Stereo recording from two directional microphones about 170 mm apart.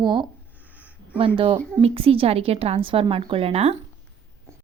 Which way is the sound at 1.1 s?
30° right (ahead or behind).